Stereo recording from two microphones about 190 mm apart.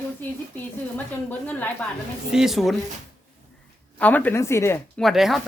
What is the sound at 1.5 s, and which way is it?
Speech, 10° left (ahead or behind).